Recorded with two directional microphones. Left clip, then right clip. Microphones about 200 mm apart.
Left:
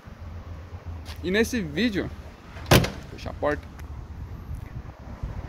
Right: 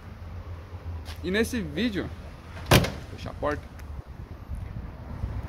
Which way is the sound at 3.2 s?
25° left (ahead or behind).